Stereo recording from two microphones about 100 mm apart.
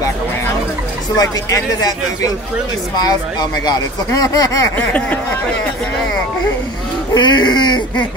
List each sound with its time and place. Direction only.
1.1 s speech: 40° left (ahead or behind)
4.7 s a sound: 15° left (ahead or behind)
7.2 s speech: 50° left (ahead or behind)